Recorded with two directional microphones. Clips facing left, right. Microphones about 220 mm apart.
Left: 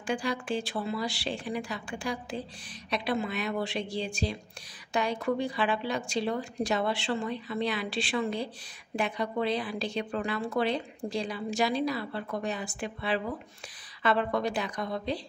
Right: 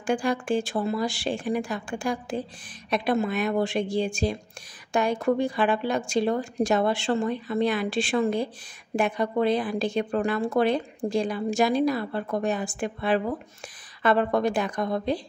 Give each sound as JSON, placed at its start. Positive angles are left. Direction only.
{"t": 0.0, "sound": "speech", "side_deg": -50}